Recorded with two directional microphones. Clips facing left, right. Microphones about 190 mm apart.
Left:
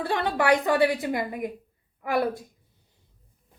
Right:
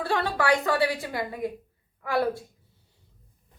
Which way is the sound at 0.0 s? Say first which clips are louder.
Left 1 dB; 20° left (ahead or behind).